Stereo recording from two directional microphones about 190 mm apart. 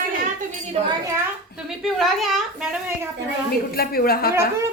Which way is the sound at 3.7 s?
55° left (ahead or behind).